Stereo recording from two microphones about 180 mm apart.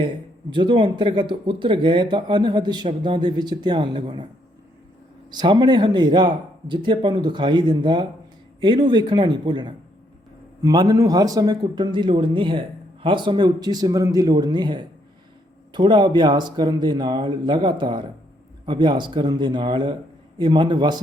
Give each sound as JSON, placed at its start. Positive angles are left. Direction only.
{"t": 0.5, "sound": "a man's voice", "side_deg": -25}
{"t": 5.3, "sound": "a man's voice", "side_deg": -25}